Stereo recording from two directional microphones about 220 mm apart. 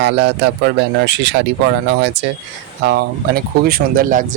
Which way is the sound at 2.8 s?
45° right (ahead or behind).